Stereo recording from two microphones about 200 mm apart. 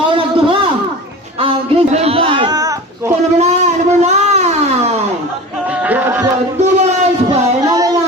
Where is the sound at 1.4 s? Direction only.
25° right (ahead or behind).